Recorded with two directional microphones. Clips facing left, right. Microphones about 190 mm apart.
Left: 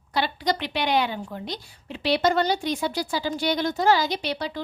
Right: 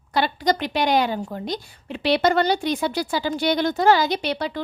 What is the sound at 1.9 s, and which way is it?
Speech, 60° right (ahead or behind).